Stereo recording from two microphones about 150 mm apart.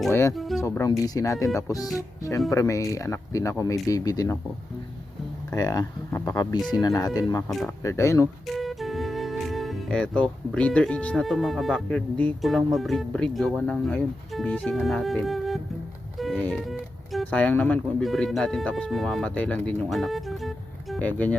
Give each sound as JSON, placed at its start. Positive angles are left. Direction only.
{"t": 0.1, "sound": "speech", "side_deg": 20}
{"t": 0.3, "sound": "music", "side_deg": 0}
{"t": 0.6, "sound": "speech", "side_deg": 20}
{"t": 5.5, "sound": "speech", "side_deg": 25}
{"t": 8.4, "sound": "speech", "side_deg": 0}
{"t": 16.1, "sound": "music", "side_deg": 0}
{"t": 17.3, "sound": "speech", "side_deg": 10}